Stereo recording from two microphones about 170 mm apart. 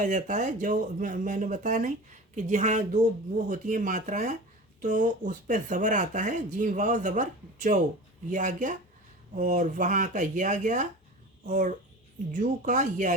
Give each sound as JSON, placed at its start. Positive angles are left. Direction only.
{"t": 0.0, "sound": "speech", "side_deg": -45}